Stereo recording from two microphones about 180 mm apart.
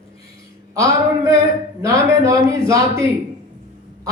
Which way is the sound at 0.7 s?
15° right (ahead or behind).